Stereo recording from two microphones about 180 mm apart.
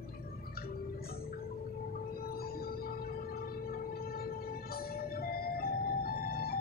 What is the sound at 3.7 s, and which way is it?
Vehicle, 55° left (ahead or behind).